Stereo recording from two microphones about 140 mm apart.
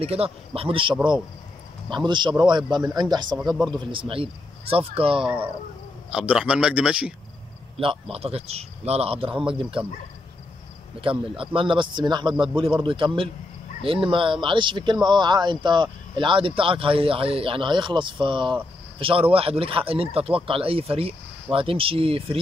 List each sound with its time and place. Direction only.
0.0 s speech: 45° right (ahead or behind)
6.0 s a man's voice: 5° right (ahead or behind)
7.7 s speech: 40° right (ahead or behind)
11.0 s speech: 40° right (ahead or behind)